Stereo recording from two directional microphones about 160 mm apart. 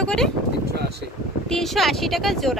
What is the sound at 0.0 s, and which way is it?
Speech, 5° left (ahead or behind).